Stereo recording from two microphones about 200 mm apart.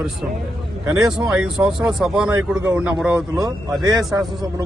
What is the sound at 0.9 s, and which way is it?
Speech, 5° right (ahead or behind).